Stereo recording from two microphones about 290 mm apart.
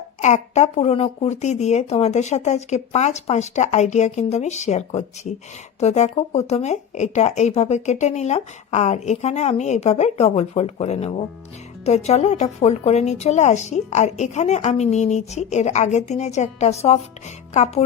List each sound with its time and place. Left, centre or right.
0.2 s speech: left